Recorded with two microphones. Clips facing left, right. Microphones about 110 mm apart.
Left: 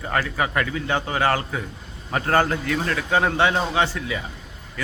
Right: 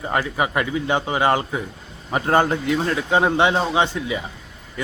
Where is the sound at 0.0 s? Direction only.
20° right (ahead or behind).